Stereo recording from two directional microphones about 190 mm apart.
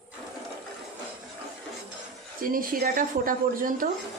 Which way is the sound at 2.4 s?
50° right (ahead or behind).